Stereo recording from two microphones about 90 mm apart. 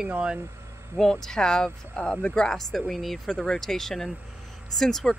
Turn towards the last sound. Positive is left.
turn(degrees=5)  # may be behind; listen again after turning